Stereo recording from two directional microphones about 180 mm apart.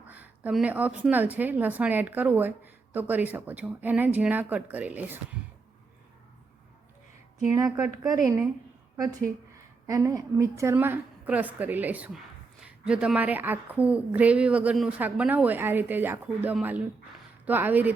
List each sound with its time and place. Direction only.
0.1 s a woman's voice: 10° right (ahead or behind)
7.5 s a woman's voice: 15° right (ahead or behind)
9.8 s a woman's voice: 20° right (ahead or behind)